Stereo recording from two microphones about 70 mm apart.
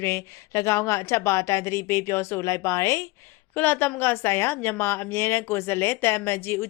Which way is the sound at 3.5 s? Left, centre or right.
Left.